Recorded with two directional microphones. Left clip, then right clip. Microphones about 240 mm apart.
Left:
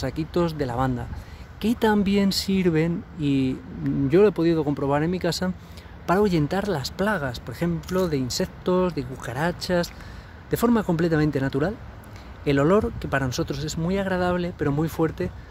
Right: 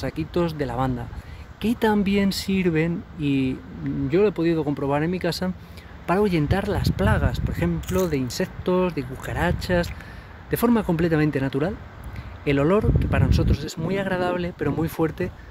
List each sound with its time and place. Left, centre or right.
0.0 s speech: centre